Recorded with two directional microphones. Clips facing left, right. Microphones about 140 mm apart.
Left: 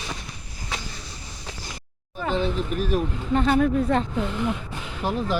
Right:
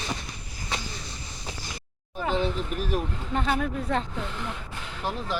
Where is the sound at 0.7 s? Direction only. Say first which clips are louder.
Even; 5° left (ahead or behind).